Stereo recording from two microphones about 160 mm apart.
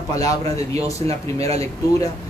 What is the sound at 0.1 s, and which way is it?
Speech, 20° left (ahead or behind).